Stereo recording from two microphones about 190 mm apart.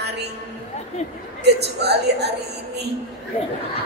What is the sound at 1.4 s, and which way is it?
Speech, 60° right (ahead or behind).